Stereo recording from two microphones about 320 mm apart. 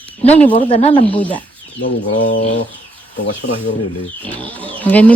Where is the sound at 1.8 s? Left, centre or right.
Left.